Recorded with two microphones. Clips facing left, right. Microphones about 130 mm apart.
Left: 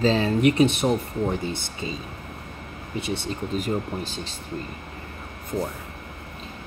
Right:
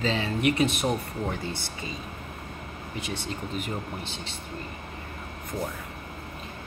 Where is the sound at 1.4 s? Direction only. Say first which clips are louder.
Left 4 dB; 20° left (ahead or behind).